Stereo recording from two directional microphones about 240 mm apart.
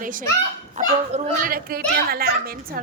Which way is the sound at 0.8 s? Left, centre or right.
Right.